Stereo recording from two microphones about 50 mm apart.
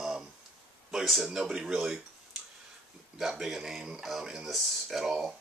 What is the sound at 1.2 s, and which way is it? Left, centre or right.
Speech, centre.